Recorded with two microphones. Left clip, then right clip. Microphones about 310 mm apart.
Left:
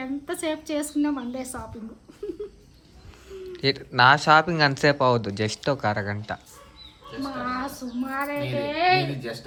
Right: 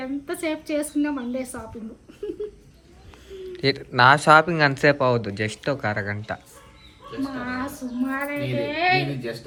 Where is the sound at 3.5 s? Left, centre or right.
Centre.